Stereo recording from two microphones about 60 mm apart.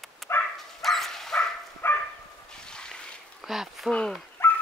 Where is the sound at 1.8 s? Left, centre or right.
Left.